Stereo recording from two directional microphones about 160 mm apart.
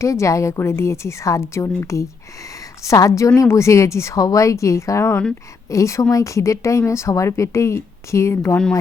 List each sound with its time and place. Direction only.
0.0 s a woman's voice: 20° left (ahead or behind)